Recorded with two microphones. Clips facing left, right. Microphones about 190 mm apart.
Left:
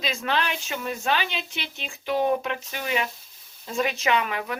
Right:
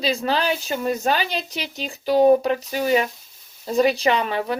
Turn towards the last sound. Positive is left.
turn(degrees=-30)  # may be behind; listen again after turning